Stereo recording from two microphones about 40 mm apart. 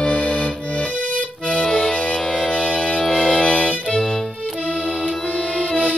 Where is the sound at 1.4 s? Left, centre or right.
Centre.